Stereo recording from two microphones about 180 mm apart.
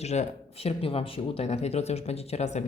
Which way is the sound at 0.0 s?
35° left (ahead or behind).